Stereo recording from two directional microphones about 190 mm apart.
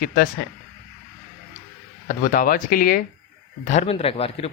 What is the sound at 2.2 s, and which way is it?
Speech, 45° left (ahead or behind).